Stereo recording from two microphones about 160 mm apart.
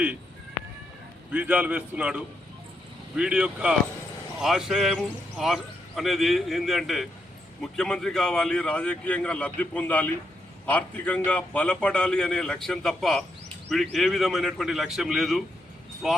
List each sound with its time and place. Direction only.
1.3 s a man's voice: 10° right (ahead or behind)